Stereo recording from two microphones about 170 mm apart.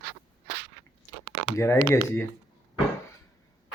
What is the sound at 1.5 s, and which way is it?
Speech, 15° left (ahead or behind).